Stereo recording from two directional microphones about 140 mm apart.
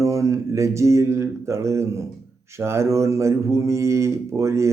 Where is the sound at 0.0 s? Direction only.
20° right (ahead or behind).